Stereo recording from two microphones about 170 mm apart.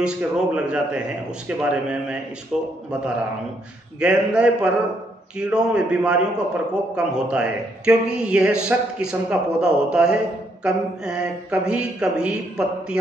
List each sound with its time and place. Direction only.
0.0 s a man's voice: 5° right (ahead or behind)
4.0 s a man's voice: 5° right (ahead or behind)